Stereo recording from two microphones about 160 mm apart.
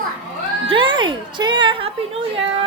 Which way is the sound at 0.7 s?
30° right (ahead or behind).